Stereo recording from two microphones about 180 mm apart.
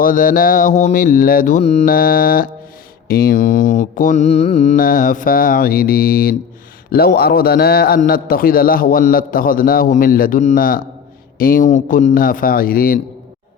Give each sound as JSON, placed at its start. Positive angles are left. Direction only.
{"t": 0.0, "sound": "a man's voice", "side_deg": 50}
{"t": 1.8, "sound": "mantra", "side_deg": 55}
{"t": 3.1, "sound": "a man's voice", "side_deg": 55}